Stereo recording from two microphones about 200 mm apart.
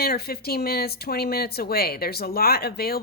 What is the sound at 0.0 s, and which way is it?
Speech, 50° left (ahead or behind).